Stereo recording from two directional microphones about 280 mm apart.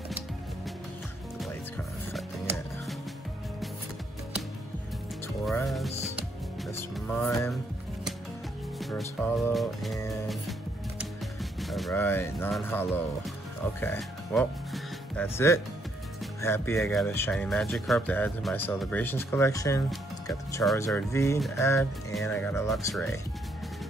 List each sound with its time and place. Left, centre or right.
5.4 s music: centre
8.7 s speech: centre
9.9 s music: centre
11.6 s speech: centre
13.7 s music: centre
16.3 s speech: centre